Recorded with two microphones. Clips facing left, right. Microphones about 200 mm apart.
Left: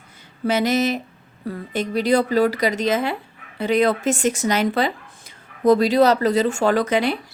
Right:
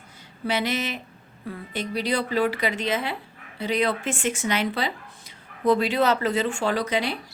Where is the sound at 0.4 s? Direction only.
45° left (ahead or behind).